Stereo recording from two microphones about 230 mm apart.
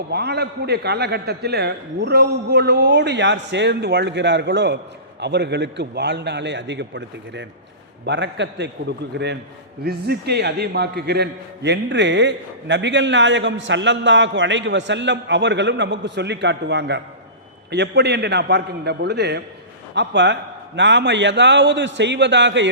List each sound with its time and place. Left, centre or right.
0.1 s a man's voice: right